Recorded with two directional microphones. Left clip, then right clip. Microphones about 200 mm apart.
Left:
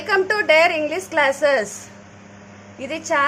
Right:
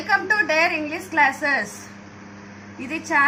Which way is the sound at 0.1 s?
50° left (ahead or behind).